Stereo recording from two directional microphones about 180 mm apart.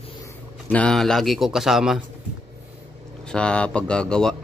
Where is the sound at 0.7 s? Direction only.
5° left (ahead or behind).